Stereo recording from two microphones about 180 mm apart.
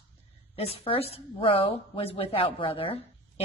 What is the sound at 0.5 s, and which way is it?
A woman's voice, 35° left (ahead or behind).